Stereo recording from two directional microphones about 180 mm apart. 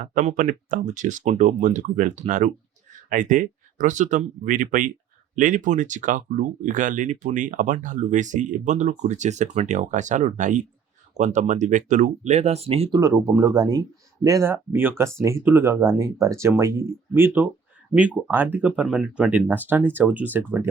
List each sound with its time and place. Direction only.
0.1 s speech: 45° right (ahead or behind)
13.0 s speech: 15° right (ahead or behind)